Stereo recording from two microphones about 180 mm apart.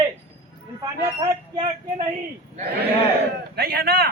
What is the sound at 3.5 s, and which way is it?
Speech, 60° right (ahead or behind).